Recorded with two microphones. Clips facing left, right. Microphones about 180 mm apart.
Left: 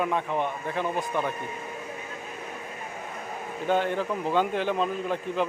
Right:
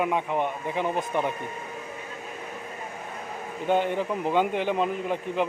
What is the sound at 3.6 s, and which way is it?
A man's voice, 15° right (ahead or behind).